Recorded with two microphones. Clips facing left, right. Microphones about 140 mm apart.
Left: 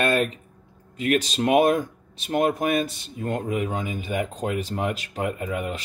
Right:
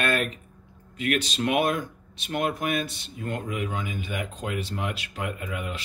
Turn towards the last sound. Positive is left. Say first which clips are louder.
# left 5 dB
turn(degrees=40)  # may be behind; listen again after turning